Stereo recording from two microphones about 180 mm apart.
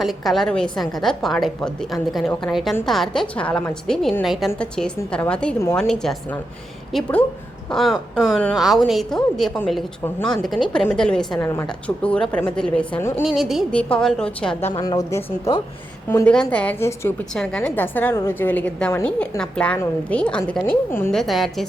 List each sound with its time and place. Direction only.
0.0 s a woman's voice: centre (ahead or behind)
11.4 s a woman's voice: 15° left (ahead or behind)
13.2 s a woman's voice: centre (ahead or behind)
14.7 s speech: 20° left (ahead or behind)
16.0 s a woman's voice: 10° left (ahead or behind)
21.1 s a woman's voice: centre (ahead or behind)